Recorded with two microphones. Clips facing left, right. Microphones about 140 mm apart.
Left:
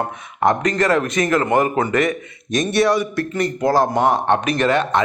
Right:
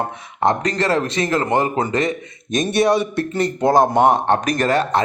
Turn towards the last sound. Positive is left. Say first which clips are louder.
# even
turn(degrees=-35)  # may be behind; listen again after turning